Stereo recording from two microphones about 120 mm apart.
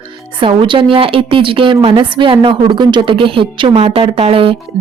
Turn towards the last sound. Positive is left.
turn(degrees=-50)  # may be behind; listen again after turning